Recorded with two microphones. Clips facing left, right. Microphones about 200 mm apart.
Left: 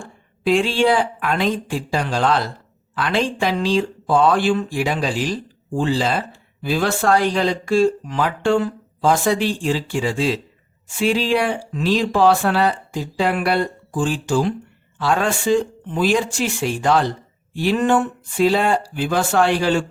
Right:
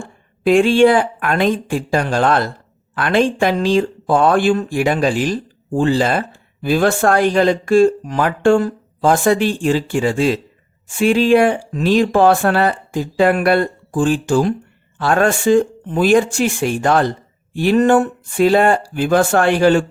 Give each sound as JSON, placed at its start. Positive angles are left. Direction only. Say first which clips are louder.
{"t": 0.4, "sound": "speech", "louder": "right 6 dB", "side_deg": -50}